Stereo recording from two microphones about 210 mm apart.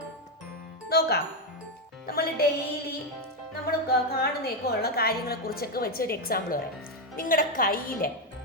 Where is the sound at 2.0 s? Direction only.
45° left (ahead or behind).